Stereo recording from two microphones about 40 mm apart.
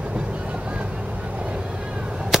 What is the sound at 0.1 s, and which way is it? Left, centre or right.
Vehicle, right.